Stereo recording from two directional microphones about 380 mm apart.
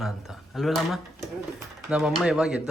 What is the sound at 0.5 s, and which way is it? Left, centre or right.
Speech, centre.